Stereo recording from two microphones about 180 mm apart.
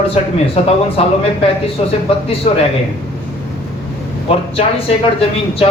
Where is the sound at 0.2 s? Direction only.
35° left (ahead or behind).